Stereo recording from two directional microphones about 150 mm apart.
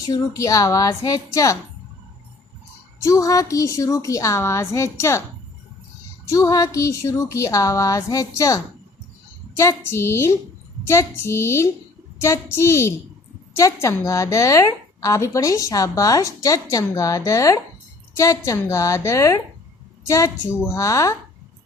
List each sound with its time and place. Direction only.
0.0 s a woman's voice: 20° left (ahead or behind)
3.0 s a woman's voice: 20° left (ahead or behind)
6.2 s a woman's voice: 20° left (ahead or behind)